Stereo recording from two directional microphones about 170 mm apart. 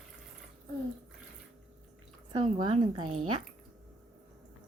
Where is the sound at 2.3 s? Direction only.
30° right (ahead or behind).